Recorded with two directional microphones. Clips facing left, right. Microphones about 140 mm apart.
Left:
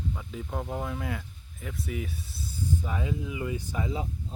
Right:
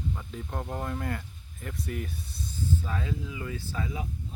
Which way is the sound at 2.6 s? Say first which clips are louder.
Left 1 dB; 15° left (ahead or behind).